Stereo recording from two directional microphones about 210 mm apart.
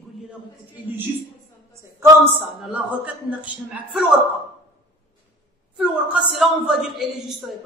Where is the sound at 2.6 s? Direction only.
5° right (ahead or behind).